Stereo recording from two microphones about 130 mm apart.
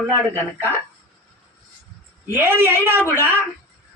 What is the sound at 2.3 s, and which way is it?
A man's voice, 15° right (ahead or behind).